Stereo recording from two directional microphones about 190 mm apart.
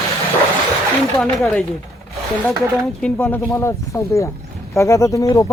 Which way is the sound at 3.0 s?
10° left (ahead or behind).